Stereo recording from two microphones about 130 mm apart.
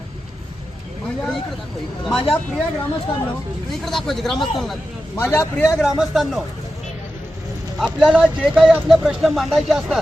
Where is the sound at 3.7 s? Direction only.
Centre (ahead or behind).